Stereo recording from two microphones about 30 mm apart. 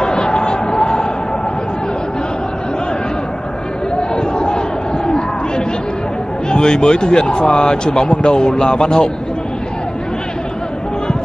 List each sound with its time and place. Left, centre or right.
0.0 s a sound: left
4.1 s crowd: left
6.5 s speech: left